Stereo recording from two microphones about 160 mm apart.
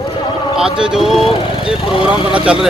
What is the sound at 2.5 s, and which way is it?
Speech, 5° right (ahead or behind).